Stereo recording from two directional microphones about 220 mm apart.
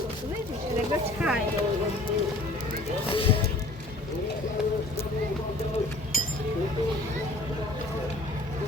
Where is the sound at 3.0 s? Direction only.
25° left (ahead or behind).